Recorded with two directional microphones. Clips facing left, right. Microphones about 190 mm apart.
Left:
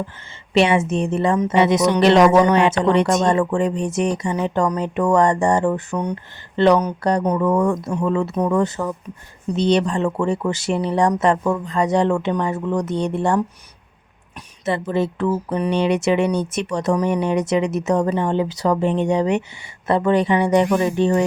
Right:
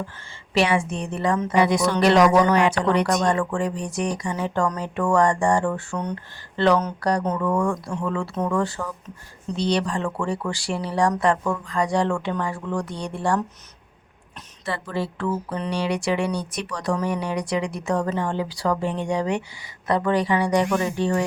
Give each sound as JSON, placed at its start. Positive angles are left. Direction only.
{"t": 0.5, "sound": "speech", "side_deg": 25}
{"t": 14.6, "sound": "speech", "side_deg": 20}